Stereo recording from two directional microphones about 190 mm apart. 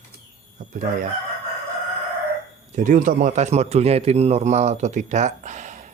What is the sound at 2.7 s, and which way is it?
Speech, 45° right (ahead or behind).